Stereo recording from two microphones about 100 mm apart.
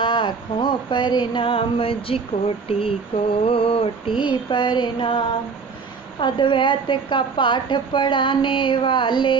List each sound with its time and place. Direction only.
0.0 s a woman's voice: 55° left (ahead or behind)
2.6 s a sound: 70° left (ahead or behind)
3.4 s a woman's voice: 70° left (ahead or behind)